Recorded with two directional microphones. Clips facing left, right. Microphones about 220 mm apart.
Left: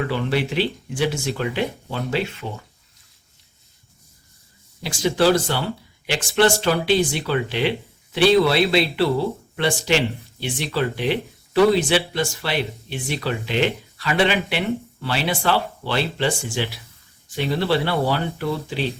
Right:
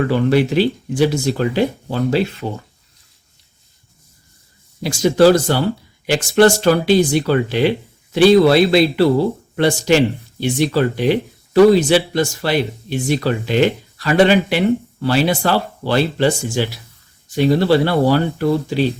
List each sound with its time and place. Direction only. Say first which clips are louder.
0.1 s speech: right 8 dB; 45° right (ahead or behind)
4.8 s speech: right 7 dB; 45° right (ahead or behind)